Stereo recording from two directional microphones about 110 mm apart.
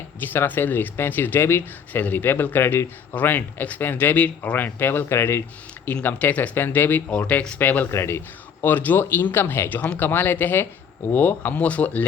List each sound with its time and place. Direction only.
0.2 s speech: 20° left (ahead or behind)